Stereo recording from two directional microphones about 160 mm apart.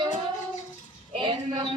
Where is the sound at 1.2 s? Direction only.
30° right (ahead or behind).